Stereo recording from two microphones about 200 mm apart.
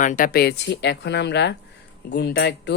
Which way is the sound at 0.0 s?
40° left (ahead or behind).